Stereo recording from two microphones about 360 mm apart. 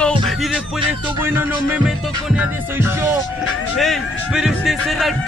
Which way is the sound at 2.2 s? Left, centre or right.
Centre.